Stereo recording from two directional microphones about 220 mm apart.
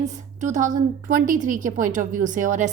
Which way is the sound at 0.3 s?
35° right (ahead or behind).